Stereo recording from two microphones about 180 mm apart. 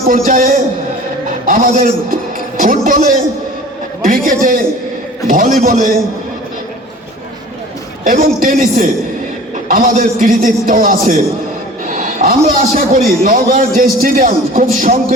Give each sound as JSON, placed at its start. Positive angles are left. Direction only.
{"t": 0.1, "sound": "a man's voice", "side_deg": -50}
{"t": 8.0, "sound": "a man's voice", "side_deg": -55}